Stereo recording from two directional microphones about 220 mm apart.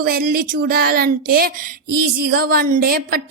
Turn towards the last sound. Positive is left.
turn(degrees=-45)  # may be behind; listen again after turning